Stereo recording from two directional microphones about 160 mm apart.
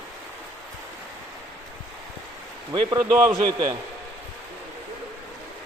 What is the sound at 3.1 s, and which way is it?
Speech, 20° right (ahead or behind).